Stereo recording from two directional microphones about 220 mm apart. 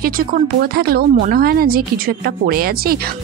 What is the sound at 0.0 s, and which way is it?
Speech, 45° right (ahead or behind).